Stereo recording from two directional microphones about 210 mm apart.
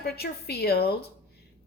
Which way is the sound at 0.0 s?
50° left (ahead or behind).